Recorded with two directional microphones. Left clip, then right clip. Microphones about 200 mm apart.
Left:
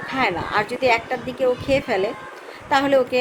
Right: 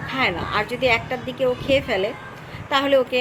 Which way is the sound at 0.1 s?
15° left (ahead or behind).